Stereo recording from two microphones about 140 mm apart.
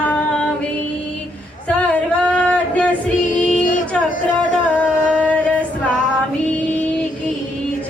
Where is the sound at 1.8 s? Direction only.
10° left (ahead or behind).